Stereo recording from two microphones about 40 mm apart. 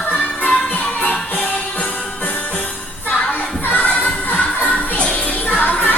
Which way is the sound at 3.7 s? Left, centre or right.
Left.